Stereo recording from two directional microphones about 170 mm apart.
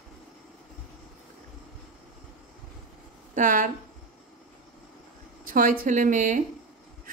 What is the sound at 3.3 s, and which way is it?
Speech, 50° right (ahead or behind).